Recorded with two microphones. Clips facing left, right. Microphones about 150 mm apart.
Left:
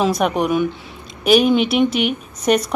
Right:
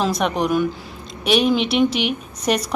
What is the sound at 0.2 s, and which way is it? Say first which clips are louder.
Speech: left 2 dB; 5° left (ahead or behind).